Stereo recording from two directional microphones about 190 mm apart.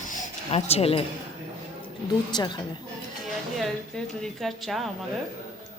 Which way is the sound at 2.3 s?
20° left (ahead or behind).